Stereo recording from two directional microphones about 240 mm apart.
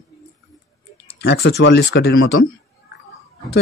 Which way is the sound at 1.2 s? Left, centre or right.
Left.